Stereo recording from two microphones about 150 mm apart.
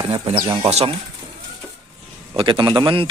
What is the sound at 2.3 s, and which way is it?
Speech, 35° right (ahead or behind).